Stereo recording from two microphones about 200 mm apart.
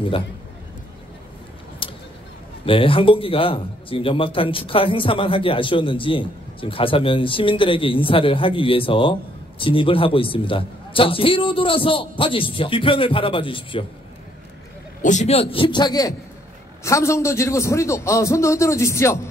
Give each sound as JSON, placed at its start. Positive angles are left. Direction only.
{"t": 1.8, "sound": "a sound", "side_deg": 25}
{"t": 2.6, "sound": "a man's voice", "side_deg": 25}
{"t": 15.0, "sound": "a man's voice", "side_deg": 35}